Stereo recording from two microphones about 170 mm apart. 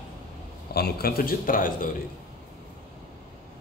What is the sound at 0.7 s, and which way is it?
A man's voice, 70° left (ahead or behind).